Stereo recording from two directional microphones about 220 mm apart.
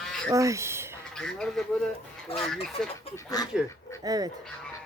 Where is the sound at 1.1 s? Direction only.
5° left (ahead or behind).